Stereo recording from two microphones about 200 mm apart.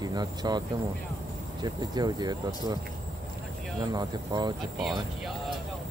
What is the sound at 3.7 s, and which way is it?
Speech, 20° right (ahead or behind).